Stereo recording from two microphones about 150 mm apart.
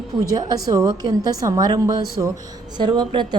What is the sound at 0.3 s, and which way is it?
A woman's voice, 25° right (ahead or behind).